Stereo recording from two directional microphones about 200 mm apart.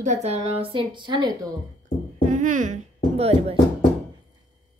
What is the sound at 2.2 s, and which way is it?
Music, 40° right (ahead or behind).